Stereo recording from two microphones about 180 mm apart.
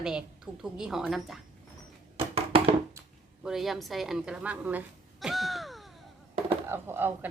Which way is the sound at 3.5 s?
Centre (ahead or behind).